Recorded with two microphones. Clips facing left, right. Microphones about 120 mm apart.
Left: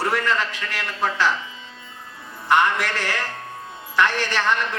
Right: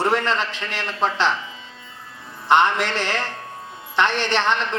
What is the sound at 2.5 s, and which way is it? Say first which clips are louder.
A man's voice: right 2 dB; 20° right (ahead or behind).